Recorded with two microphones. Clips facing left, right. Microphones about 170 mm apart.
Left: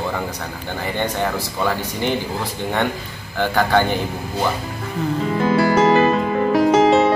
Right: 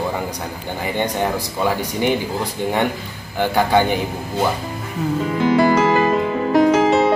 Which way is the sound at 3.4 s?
10° right (ahead or behind).